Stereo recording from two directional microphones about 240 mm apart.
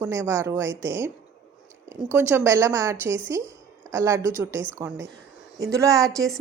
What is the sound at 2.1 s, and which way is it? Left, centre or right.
A woman's voice, centre.